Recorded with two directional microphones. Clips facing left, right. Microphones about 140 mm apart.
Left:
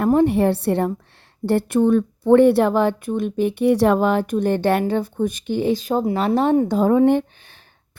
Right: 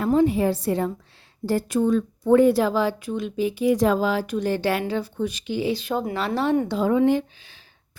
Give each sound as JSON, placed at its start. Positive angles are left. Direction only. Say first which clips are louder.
{"t": 0.0, "sound": "speech", "louder": "left 3 dB", "side_deg": 60}